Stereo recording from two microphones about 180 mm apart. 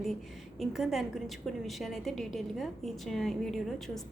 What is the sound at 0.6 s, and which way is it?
A woman's voice, centre (ahead or behind).